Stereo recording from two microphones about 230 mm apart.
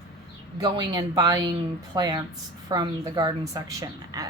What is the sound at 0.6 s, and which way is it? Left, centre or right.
A woman's voice, centre.